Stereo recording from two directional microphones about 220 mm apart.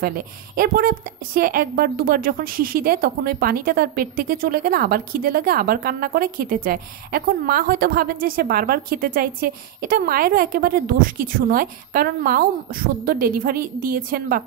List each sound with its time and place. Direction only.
0.0 s a woman's voice: 40° right (ahead or behind)